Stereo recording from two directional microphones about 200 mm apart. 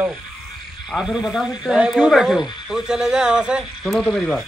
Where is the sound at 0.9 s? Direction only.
Centre (ahead or behind).